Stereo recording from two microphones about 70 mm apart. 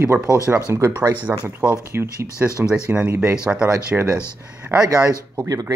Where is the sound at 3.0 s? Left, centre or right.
Right.